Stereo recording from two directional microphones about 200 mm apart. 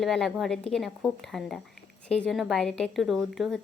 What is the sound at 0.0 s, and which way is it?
Speech, centre (ahead or behind).